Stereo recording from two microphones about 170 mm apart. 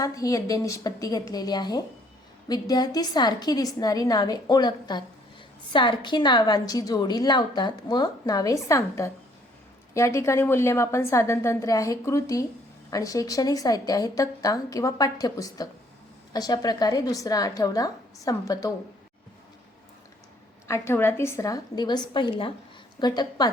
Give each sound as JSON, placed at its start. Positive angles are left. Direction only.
{"t": 0.0, "sound": "a woman's voice", "side_deg": 20}
{"t": 20.7, "sound": "a woman's voice", "side_deg": 15}